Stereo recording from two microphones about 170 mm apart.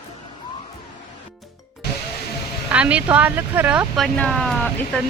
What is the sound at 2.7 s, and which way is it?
Speech, 5° right (ahead or behind).